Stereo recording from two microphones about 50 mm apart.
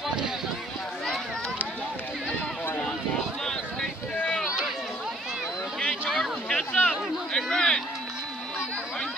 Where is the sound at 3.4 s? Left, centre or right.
Centre.